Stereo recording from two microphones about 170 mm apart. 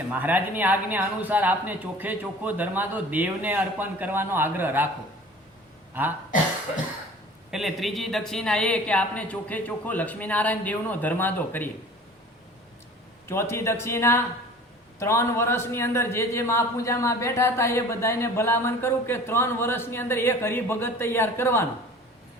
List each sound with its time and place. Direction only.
0.1 s speech: 10° right (ahead or behind)
6.0 s speech: 10° right (ahead or behind)
7.5 s a man's voice: centre (ahead or behind)
13.2 s a man's voice: 15° left (ahead or behind)